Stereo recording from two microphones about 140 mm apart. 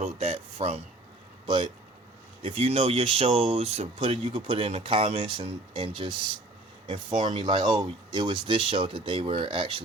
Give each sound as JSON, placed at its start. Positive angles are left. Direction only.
{"t": 0.2, "sound": "a sound", "side_deg": -50}
{"t": 1.5, "sound": "speech", "side_deg": -40}
{"t": 7.3, "sound": "speech", "side_deg": -35}